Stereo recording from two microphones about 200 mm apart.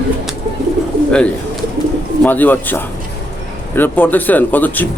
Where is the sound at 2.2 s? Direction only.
10° left (ahead or behind).